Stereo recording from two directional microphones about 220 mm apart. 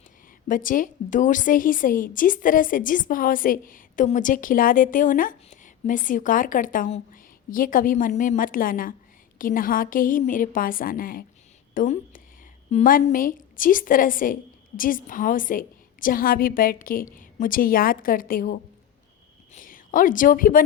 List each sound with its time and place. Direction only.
0.4 s a woman's voice: 40° left (ahead or behind)